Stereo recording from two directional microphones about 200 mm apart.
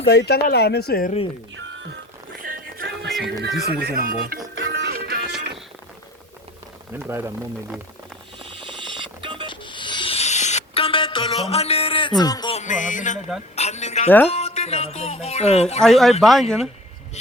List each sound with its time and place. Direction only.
0.1 s speech: 55° left (ahead or behind)
1.5 s music: 70° right (ahead or behind)
2.4 s music: 45° right (ahead or behind)
3.1 s music: centre (ahead or behind)
3.4 s speech: 50° right (ahead or behind)
4.6 s music: 60° right (ahead or behind)
7.1 s speech: 15° right (ahead or behind)
8.4 s vehicle: 25° right (ahead or behind)
9.5 s a sound: 25° left (ahead or behind)
12.5 s music: 40° left (ahead or behind)
13.6 s a sound: 35° left (ahead or behind)
14.3 s speech: 30° left (ahead or behind)
15.8 s speech: centre (ahead or behind)